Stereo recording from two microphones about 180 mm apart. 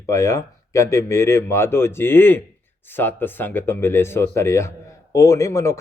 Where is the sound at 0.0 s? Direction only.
15° left (ahead or behind).